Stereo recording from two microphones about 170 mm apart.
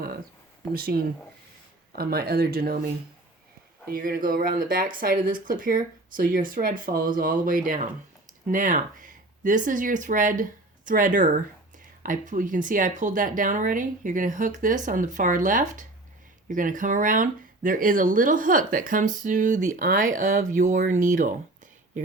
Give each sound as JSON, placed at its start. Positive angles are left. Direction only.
{"t": 0.7, "sound": "speech", "side_deg": -60}